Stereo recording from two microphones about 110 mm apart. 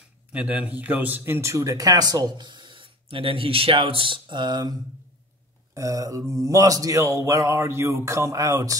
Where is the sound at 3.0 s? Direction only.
55° right (ahead or behind).